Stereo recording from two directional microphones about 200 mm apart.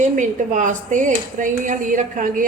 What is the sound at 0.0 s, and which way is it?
A woman's voice, 40° right (ahead or behind).